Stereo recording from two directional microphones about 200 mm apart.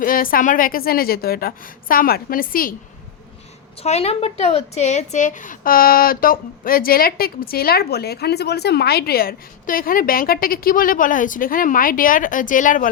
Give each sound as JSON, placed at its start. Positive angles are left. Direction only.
{"t": 0.0, "sound": "a woman's voice", "side_deg": 45}
{"t": 3.8, "sound": "a woman's voice", "side_deg": 30}